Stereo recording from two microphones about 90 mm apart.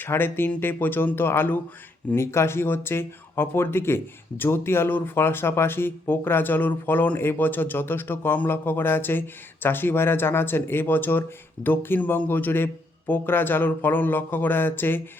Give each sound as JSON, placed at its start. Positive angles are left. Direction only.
{"t": 0.0, "sound": "speech", "side_deg": 25}